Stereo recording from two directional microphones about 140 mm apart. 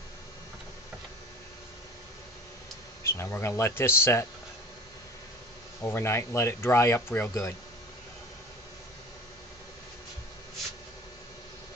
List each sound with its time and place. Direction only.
3.0 s speech: 20° left (ahead or behind)
5.8 s speech: 20° left (ahead or behind)